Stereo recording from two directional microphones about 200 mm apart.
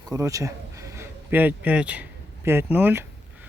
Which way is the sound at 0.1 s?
15° right (ahead or behind).